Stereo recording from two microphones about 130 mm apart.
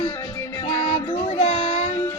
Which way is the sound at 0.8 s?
50° left (ahead or behind).